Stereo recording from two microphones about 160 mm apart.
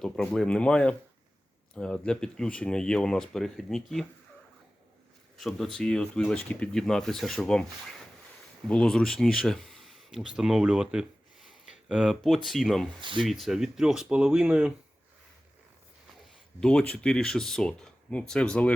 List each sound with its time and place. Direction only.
0.0 s speech: 5° left (ahead or behind)
5.4 s speech: centre (ahead or behind)
8.6 s speech: 5° left (ahead or behind)
13.0 s speech: 30° right (ahead or behind)
13.2 s speech: centre (ahead or behind)
16.6 s speech: 5° left (ahead or behind)